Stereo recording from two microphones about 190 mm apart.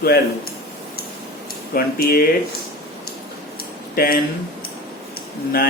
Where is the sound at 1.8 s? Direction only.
50° left (ahead or behind).